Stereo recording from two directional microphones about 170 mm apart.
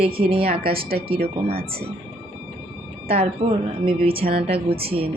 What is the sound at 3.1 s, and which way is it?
Speech, 35° right (ahead or behind).